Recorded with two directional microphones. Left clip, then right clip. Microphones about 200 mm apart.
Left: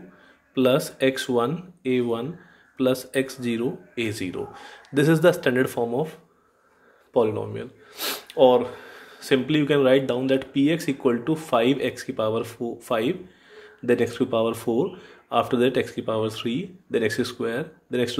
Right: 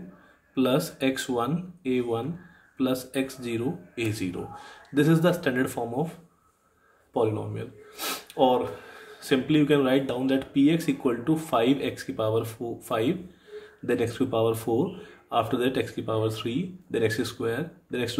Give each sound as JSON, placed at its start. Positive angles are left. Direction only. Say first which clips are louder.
{"t": 0.6, "sound": "a man's voice", "louder": "left 5 dB", "side_deg": 20}
{"t": 7.2, "sound": "a man's voice", "louder": "left 4 dB", "side_deg": 20}